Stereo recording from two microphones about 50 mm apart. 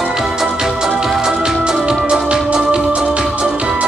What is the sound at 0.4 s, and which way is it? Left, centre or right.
Music, centre.